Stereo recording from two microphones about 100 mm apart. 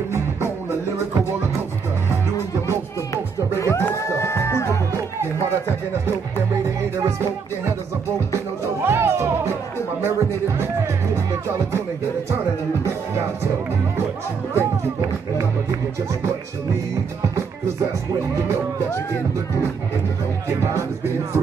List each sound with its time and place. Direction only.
0.1 s music: 25° right (ahead or behind)
3.5 s a sound: 30° left (ahead or behind)
3.9 s music: 30° left (ahead or behind)
7.0 s music: 30° right (ahead or behind)
8.8 s music: 25° right (ahead or behind)
12.8 s music: 25° right (ahead or behind)
14.5 s music: 30° right (ahead or behind)
20.4 s speech: 30° right (ahead or behind)